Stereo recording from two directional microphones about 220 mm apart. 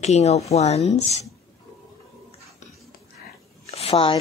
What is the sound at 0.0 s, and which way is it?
Speech, 30° left (ahead or behind).